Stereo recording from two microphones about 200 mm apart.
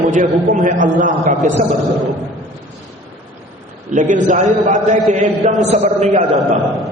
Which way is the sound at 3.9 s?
40° right (ahead or behind).